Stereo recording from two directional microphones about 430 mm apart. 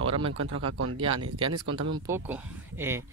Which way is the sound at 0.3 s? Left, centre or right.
Right.